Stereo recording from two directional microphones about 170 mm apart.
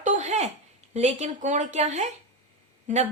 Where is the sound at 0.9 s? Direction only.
40° right (ahead or behind).